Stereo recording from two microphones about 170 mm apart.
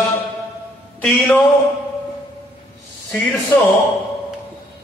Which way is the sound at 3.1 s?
15° left (ahead or behind).